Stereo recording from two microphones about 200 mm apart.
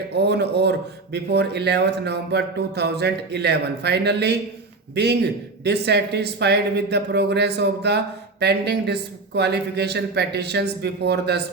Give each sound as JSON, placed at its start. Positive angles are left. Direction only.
{"t": 0.2, "sound": "speech", "side_deg": -55}